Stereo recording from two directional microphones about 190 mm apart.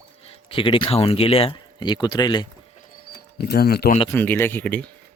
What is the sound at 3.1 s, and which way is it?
Speech, 55° left (ahead or behind).